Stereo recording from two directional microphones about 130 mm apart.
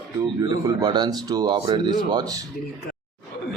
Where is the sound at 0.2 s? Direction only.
25° right (ahead or behind).